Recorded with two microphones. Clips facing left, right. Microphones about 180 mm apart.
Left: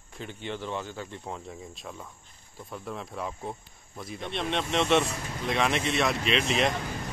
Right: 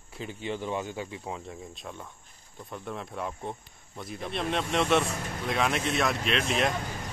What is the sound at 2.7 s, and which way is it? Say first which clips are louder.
Speech: even; centre (ahead or behind).